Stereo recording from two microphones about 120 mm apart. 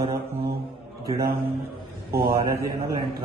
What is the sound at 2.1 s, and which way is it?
Mantra, 25° right (ahead or behind).